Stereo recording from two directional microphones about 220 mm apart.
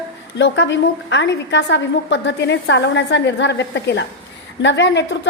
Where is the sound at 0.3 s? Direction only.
55° left (ahead or behind).